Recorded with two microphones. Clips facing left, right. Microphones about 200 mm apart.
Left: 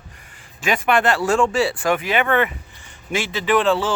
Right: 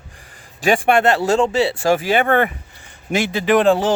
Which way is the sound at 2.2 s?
50° right (ahead or behind).